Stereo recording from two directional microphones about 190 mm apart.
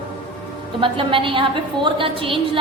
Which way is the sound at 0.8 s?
25° right (ahead or behind).